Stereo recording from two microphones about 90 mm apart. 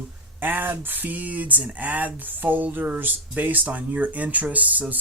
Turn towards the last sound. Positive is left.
turn(degrees=-15)  # may be behind; listen again after turning